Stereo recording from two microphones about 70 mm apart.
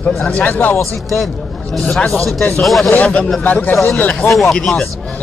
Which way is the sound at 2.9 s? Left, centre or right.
Centre.